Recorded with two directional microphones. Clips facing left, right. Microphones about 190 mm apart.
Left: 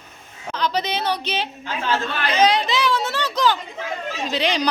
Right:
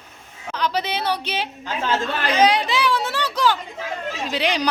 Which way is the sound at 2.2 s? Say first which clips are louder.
Even; 10° right (ahead or behind).